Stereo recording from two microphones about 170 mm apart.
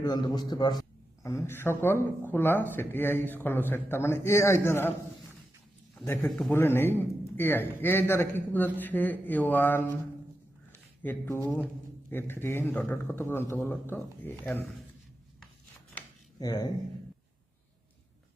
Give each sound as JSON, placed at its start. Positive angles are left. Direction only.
{"t": 0.0, "sound": "a man's voice", "side_deg": 25}
{"t": 6.1, "sound": "speech", "side_deg": 10}
{"t": 11.0, "sound": "speech", "side_deg": 10}
{"t": 16.4, "sound": "a man's voice", "side_deg": 20}